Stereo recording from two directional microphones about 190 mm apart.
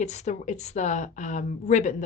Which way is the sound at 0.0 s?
35° left (ahead or behind).